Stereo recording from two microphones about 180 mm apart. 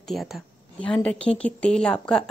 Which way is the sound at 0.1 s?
Centre (ahead or behind).